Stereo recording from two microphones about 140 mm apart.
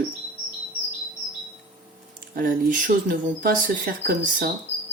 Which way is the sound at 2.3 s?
85° right.